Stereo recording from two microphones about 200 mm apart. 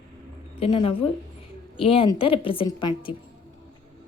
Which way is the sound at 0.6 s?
30° left (ahead or behind).